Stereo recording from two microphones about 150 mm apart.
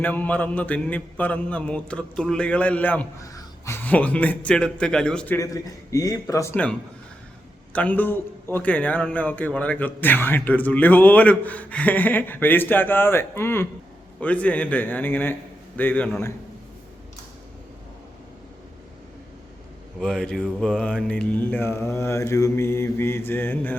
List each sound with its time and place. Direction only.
0.0 s a man's voice: 10° left (ahead or behind)
5.9 s a man's voice: 25° left (ahead or behind)
20.0 s a man's voice: 5° left (ahead or behind)